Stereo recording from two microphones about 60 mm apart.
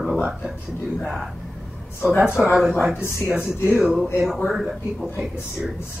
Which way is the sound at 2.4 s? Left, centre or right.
Left.